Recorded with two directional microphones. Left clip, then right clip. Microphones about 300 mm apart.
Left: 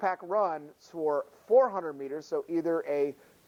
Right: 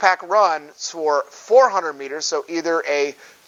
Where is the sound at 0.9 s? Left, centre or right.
Centre.